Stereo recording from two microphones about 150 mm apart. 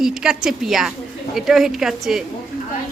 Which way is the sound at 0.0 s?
5° right (ahead or behind).